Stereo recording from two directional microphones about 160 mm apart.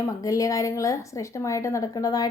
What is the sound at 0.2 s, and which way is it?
A woman's voice, 20° left (ahead or behind).